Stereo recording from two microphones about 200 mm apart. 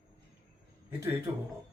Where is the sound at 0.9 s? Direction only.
15° right (ahead or behind).